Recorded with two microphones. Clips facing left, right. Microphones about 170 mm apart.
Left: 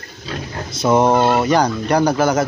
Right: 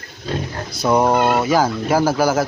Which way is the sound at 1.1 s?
25° left (ahead or behind).